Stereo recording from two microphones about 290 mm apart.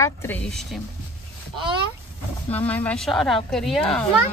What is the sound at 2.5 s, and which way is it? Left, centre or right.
Speech, centre.